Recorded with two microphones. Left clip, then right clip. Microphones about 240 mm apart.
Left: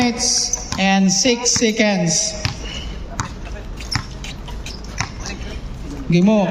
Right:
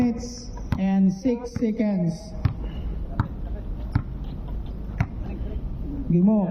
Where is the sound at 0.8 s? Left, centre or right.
Left.